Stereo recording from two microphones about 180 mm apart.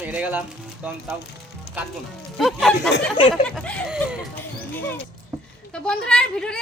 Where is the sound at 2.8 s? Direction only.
75° left (ahead or behind).